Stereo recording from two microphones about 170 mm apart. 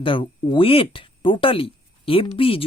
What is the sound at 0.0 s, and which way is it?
Speech, 30° left (ahead or behind).